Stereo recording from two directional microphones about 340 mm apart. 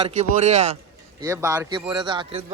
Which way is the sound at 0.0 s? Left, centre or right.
Centre.